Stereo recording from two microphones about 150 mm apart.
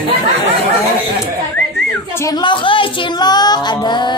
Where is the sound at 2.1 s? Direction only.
20° left (ahead or behind).